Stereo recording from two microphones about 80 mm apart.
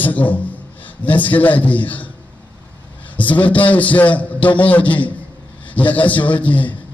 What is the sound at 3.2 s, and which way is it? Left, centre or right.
A man's voice, centre.